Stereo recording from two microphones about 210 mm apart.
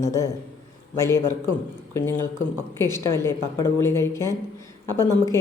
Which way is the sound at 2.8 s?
10° left (ahead or behind).